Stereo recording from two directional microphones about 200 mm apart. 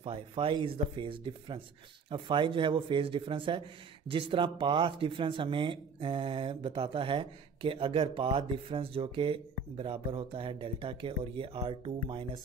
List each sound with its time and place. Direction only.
0.0 s speech: 25° right (ahead or behind)